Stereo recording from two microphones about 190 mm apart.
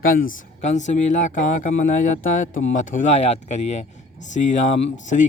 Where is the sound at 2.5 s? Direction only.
90° left.